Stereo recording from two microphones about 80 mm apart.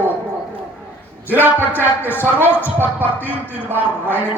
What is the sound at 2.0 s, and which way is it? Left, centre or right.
Speech, left.